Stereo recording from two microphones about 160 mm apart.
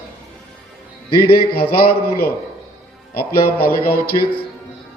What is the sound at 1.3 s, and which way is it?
A man's voice, 75° left (ahead or behind).